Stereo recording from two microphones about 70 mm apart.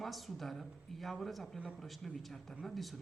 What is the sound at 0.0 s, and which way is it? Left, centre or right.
A man's voice, centre.